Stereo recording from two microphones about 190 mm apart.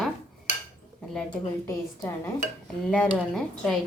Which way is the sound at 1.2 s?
15° left (ahead or behind).